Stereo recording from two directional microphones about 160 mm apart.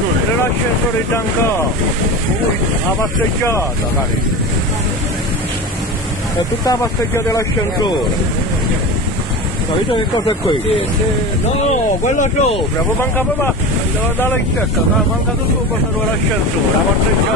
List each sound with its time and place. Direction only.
6.6 s speech: 20° left (ahead or behind)
12.0 s speech: 50° left (ahead or behind)